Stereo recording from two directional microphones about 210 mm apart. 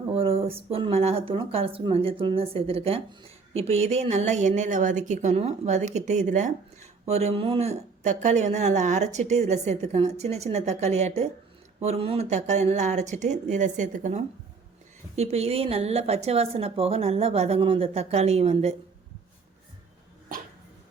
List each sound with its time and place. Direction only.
0.1 s a woman's voice: 25° right (ahead or behind)